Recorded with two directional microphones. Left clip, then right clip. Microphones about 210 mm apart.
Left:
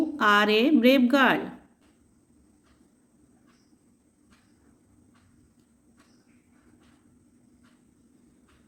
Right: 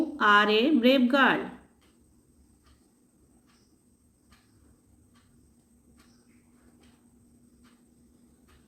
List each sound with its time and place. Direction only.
0.2 s a woman's voice: 25° left (ahead or behind)